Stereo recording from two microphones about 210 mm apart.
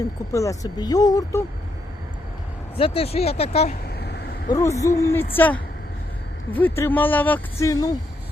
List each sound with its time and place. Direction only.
0.3 s speech: 15° left (ahead or behind)
2.7 s speech: 25° left (ahead or behind)
3.8 s a sound: 50° left (ahead or behind)
4.4 s speech: 15° left (ahead or behind)